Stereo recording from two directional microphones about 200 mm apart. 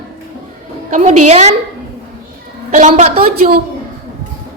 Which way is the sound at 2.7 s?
35° right (ahead or behind).